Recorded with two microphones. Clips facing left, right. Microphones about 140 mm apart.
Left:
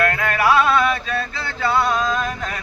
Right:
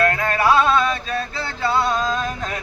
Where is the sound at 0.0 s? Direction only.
25° right (ahead or behind).